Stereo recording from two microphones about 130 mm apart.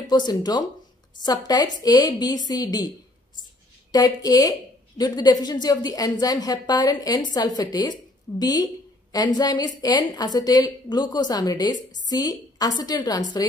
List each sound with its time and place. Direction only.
0.0 s a woman's voice: 35° left (ahead or behind)
3.9 s a woman's voice: 30° left (ahead or behind)